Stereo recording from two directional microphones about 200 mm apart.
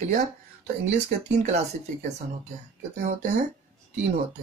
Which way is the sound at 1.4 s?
35° right (ahead or behind).